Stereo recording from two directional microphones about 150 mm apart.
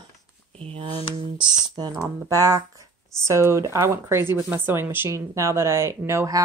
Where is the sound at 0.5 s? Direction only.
40° right (ahead or behind).